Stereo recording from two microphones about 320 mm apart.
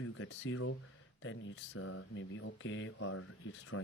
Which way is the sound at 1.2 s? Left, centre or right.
Left.